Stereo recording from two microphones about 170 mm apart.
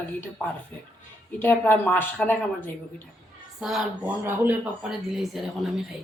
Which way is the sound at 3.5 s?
5° right (ahead or behind).